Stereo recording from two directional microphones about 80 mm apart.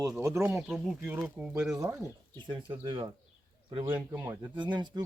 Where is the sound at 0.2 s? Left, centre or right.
Right.